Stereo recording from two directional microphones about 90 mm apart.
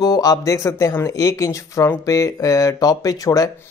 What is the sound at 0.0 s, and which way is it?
Speech, 45° left (ahead or behind).